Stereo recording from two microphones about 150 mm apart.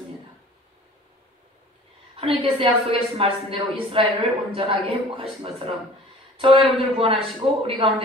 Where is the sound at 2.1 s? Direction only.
35° right (ahead or behind).